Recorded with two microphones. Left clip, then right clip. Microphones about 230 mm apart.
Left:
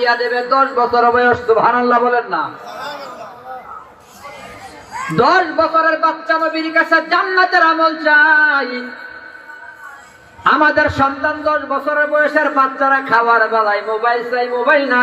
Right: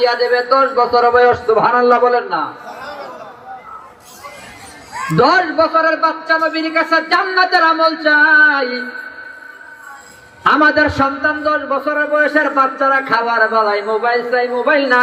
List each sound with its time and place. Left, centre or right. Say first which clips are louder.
0.0 s a man's voice: right 2 dB; right
5.1 s a man's voice: right 1 dB; right
10.4 s a man's voice: right 1 dB; right